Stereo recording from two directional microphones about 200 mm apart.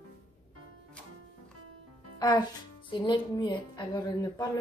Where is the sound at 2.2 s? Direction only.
20° left (ahead or behind).